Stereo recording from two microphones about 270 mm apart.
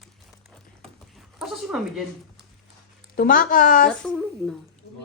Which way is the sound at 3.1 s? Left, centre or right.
Left.